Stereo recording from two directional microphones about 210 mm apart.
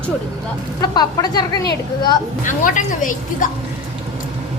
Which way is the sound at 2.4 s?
40° left (ahead or behind).